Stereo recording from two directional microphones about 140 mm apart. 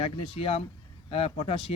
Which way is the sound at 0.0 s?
45° left (ahead or behind).